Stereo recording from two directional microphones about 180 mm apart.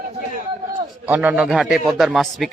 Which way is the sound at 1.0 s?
10° right (ahead or behind).